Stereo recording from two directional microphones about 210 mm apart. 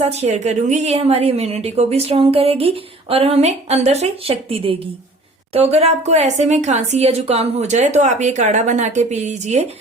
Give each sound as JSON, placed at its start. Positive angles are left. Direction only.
{"t": 0.0, "sound": "a woman's voice", "side_deg": -30}